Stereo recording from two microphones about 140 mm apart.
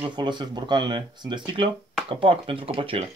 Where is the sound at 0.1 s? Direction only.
30° right (ahead or behind).